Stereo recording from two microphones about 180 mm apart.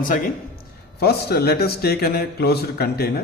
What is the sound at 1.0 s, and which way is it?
A man's voice, 65° left (ahead or behind).